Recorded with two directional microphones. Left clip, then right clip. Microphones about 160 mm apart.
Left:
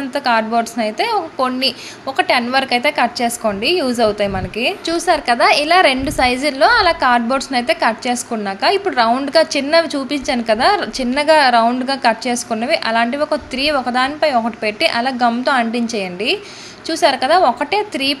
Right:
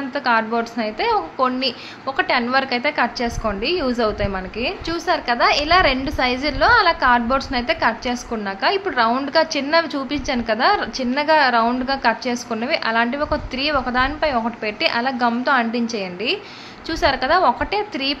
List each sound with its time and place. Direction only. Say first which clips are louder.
0.1 s a woman's voice: left 3 dB; 20° left (ahead or behind)